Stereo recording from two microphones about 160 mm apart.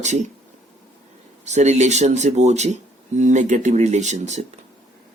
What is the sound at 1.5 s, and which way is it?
Speech, 45° right (ahead or behind).